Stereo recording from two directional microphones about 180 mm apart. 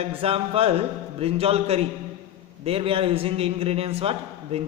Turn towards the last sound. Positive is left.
turn(degrees=-35)  # may be behind; listen again after turning